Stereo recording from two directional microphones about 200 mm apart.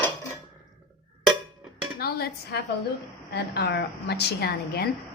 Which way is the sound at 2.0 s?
50° left (ahead or behind).